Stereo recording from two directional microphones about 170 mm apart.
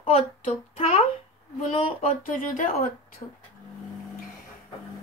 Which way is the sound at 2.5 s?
50° left (ahead or behind).